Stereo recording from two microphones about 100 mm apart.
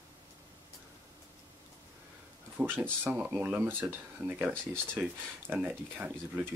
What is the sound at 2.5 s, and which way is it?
Speech, 20° right (ahead or behind).